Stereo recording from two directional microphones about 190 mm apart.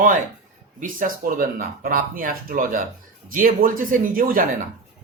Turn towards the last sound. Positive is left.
turn(degrees=-50)  # may be behind; listen again after turning